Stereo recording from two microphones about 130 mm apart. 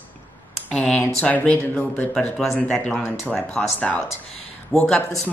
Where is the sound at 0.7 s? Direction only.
10° left (ahead or behind).